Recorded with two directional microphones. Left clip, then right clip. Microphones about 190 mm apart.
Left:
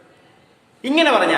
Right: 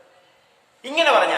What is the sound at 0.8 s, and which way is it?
Speech, 10° left (ahead or behind).